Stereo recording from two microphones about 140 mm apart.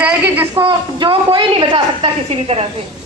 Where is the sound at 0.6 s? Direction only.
35° right (ahead or behind).